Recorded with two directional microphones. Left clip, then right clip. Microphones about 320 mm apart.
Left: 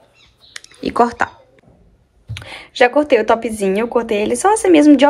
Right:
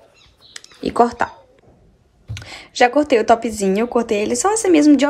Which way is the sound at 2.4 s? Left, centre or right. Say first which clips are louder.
Left 2 dB; centre.